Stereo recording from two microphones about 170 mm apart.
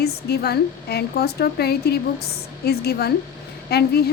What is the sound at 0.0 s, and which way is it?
A woman's voice, 70° left (ahead or behind).